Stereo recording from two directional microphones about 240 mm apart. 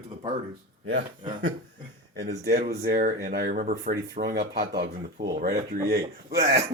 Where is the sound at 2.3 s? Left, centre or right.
Right.